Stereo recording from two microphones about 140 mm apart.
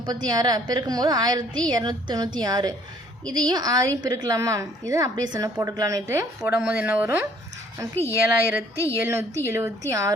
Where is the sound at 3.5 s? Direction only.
25° right (ahead or behind).